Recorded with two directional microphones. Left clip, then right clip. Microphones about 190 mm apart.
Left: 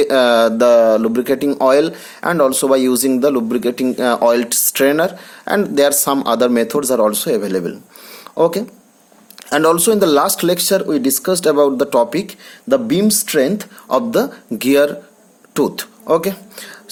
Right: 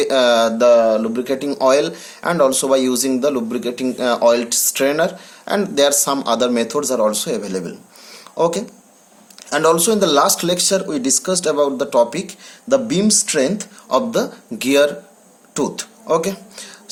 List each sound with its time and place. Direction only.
0.0 s speech: 40° left (ahead or behind)